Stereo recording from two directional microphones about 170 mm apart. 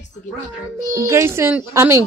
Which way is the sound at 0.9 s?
15° right (ahead or behind).